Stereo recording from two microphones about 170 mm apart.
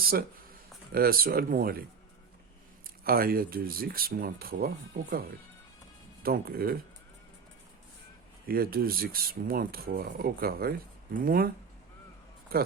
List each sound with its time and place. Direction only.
0.0 s speech: 60° right (ahead or behind)
3.0 s speech: 60° right (ahead or behind)
6.2 s speech: 60° right (ahead or behind)
8.4 s speech: 60° right (ahead or behind)